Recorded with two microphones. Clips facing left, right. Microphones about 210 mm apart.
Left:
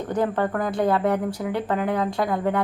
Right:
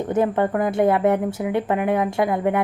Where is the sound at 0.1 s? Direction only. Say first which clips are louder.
Right 3 dB; 25° right (ahead or behind).